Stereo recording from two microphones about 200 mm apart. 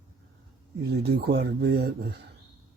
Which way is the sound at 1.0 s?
55° right (ahead or behind).